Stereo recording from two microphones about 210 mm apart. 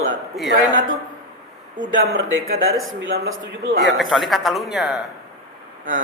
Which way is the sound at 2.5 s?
70° right (ahead or behind).